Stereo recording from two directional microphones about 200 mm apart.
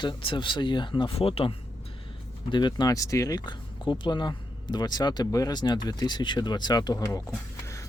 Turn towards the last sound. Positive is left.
turn(degrees=20)  # may be behind; listen again after turning